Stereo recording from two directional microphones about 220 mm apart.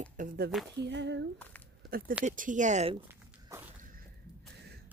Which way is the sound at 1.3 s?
5° left (ahead or behind).